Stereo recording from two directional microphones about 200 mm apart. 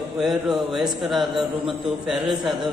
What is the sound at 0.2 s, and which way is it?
A man's voice, 5° right (ahead or behind).